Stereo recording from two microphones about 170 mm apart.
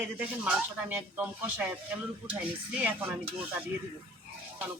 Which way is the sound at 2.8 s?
10° right (ahead or behind).